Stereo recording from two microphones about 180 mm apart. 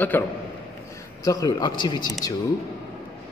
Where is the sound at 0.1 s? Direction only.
10° left (ahead or behind).